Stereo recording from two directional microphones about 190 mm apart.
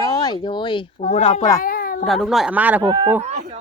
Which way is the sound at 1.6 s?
50° left (ahead or behind).